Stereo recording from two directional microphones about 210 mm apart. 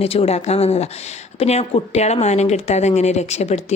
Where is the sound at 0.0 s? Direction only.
30° left (ahead or behind).